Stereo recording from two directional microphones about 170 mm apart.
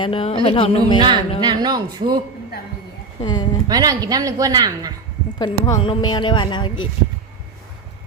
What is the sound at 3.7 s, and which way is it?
A woman's voice, 20° right (ahead or behind).